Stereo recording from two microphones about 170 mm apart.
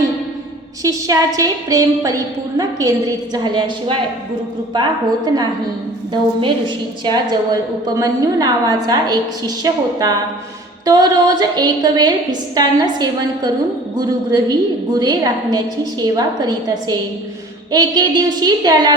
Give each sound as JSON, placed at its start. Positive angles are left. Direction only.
{"t": 0.8, "sound": "a woman's voice", "side_deg": -20}
{"t": 7.0, "sound": "a woman's voice", "side_deg": -25}